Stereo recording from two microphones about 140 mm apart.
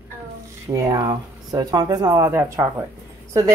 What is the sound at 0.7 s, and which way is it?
Speech, 25° right (ahead or behind).